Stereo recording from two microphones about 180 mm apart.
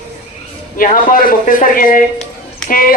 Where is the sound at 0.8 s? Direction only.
50° left (ahead or behind).